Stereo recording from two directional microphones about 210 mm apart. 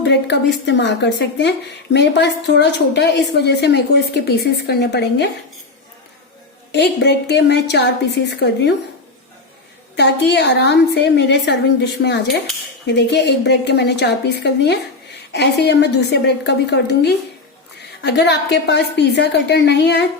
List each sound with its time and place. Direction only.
0.0 s speech: 55° left (ahead or behind)
6.7 s speech: 55° left (ahead or behind)
10.0 s a woman's voice: 55° left (ahead or behind)